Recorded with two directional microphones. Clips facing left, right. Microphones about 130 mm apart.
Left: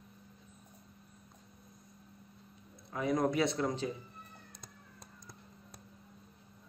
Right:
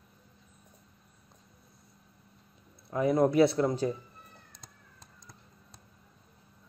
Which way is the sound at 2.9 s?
30° right (ahead or behind).